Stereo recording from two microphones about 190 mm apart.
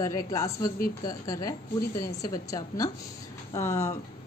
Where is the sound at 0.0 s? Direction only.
15° left (ahead or behind).